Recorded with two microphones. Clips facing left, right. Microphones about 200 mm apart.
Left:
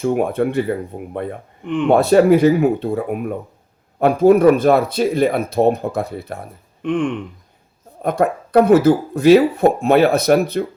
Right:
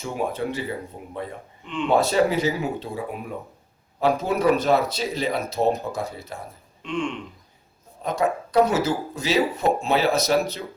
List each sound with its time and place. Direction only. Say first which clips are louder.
0.0 s speech: left 9 dB; 55° left (ahead or behind)
6.8 s a sound: left 8 dB; 55° left (ahead or behind)
8.0 s speech: left 6 dB; 55° left (ahead or behind)